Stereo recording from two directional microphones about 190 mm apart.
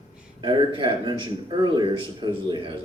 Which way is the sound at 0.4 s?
25° right (ahead or behind).